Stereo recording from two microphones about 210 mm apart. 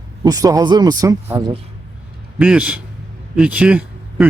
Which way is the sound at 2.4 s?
5° right (ahead or behind).